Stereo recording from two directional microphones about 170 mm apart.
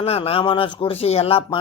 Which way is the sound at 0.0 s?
35° left (ahead or behind).